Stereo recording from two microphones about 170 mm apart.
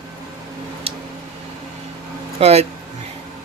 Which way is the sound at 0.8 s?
35° right (ahead or behind).